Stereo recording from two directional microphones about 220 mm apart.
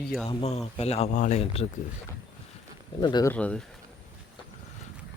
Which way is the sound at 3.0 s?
20° left (ahead or behind).